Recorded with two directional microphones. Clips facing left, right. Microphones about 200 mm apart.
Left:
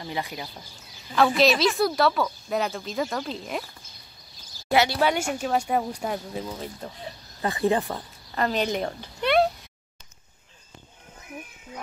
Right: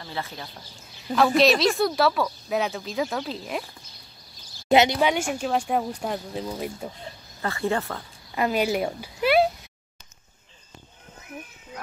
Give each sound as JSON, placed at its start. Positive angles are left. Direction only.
{"t": 0.0, "sound": "speech", "side_deg": 15}
{"t": 1.1, "sound": "speech", "side_deg": 0}
{"t": 4.6, "sound": "speech", "side_deg": -20}
{"t": 5.3, "sound": "speech", "side_deg": 5}
{"t": 6.8, "sound": "speech", "side_deg": -10}
{"t": 7.4, "sound": "speech", "side_deg": 20}
{"t": 8.4, "sound": "speech", "side_deg": -10}